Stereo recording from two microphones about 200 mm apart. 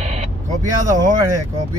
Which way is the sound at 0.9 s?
15° right (ahead or behind).